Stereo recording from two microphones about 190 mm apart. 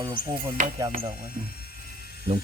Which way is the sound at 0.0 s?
25° right (ahead or behind).